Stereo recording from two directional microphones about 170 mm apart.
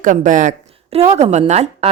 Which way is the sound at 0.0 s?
50° right (ahead or behind).